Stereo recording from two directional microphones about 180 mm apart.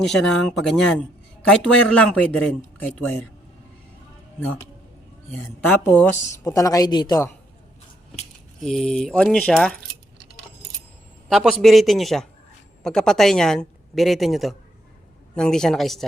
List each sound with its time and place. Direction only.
0.0 s speech: centre (ahead or behind)
5.3 s speech: 10° left (ahead or behind)
8.6 s speech: 5° left (ahead or behind)
11.3 s speech: centre (ahead or behind)